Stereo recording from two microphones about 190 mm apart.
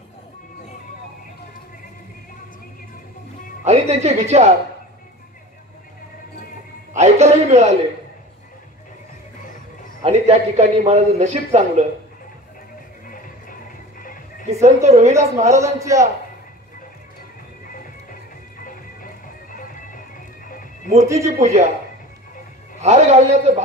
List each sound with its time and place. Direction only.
3.6 s a man's voice: 35° right (ahead or behind)
7.0 s music: 35° right (ahead or behind)
10.0 s a man's voice: 35° right (ahead or behind)
13.0 s music: 45° left (ahead or behind)
14.5 s a man's voice: 35° right (ahead or behind)
15.6 s a man's voice: 15° right (ahead or behind)
18.6 s music: 45° left (ahead or behind)
21.0 s a man's voice: 15° right (ahead or behind)
21.4 s a man's voice: 35° right (ahead or behind)
22.8 s a man's voice: 35° right (ahead or behind)